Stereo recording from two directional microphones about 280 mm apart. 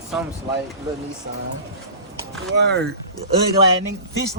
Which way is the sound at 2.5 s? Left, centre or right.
Right.